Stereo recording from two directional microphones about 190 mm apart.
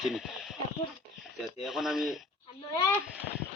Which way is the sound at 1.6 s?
Centre (ahead or behind).